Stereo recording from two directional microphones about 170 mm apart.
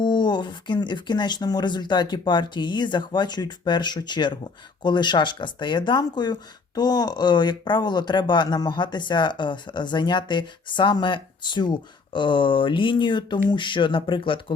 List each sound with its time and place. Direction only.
0.0 s speech: 25° left (ahead or behind)